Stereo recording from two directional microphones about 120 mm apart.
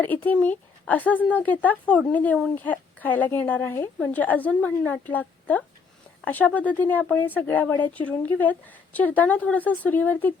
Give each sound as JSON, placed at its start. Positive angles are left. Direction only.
{"t": 0.0, "sound": "speech", "side_deg": 15}